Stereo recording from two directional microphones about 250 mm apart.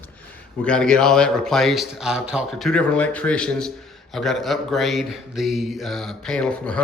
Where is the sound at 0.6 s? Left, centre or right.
Centre.